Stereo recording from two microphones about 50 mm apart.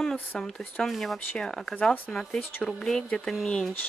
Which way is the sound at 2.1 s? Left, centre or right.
Centre.